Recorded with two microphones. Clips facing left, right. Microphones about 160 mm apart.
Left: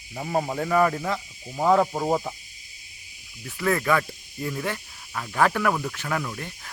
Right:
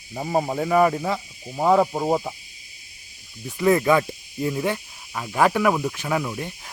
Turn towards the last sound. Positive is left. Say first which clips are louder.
# right 4 dB
turn(degrees=-15)  # may be behind; listen again after turning